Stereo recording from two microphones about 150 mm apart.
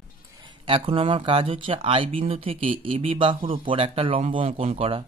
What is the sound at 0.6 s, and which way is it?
Speech, 35° right (ahead or behind).